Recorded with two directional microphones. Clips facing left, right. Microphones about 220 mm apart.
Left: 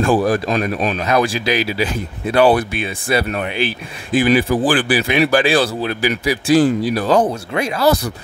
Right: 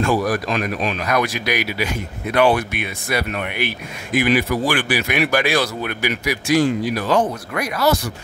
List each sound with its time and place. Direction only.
0.0 s speech: 30° left (ahead or behind)